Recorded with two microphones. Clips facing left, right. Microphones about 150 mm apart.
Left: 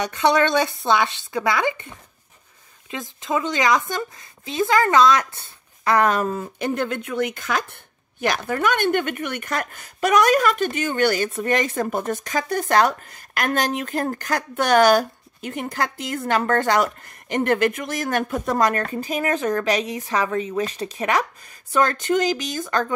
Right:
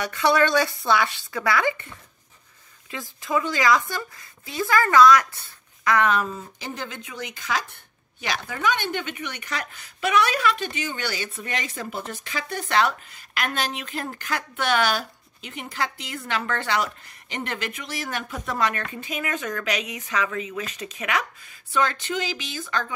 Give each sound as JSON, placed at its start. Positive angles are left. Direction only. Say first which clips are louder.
{"t": 0.0, "sound": "speech", "louder": "left 2 dB", "side_deg": 20}